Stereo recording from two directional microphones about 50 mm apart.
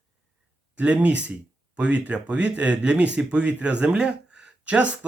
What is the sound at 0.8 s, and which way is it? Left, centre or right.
Speech, right.